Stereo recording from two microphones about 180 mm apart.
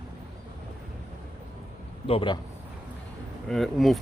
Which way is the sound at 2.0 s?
30° left (ahead or behind).